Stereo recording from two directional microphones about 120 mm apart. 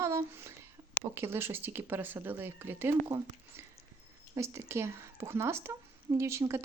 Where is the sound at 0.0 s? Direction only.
25° right (ahead or behind).